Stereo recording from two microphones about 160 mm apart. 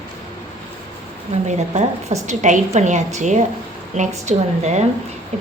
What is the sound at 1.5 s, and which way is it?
A woman's voice, 45° right (ahead or behind).